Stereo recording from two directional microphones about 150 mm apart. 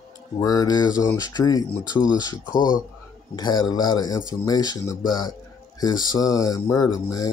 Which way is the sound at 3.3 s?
30° left (ahead or behind).